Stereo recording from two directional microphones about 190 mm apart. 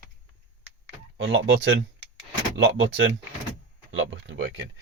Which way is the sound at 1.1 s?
70° right (ahead or behind).